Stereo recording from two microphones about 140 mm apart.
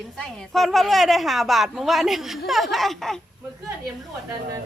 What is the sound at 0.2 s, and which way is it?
A woman's voice, 5° left (ahead or behind).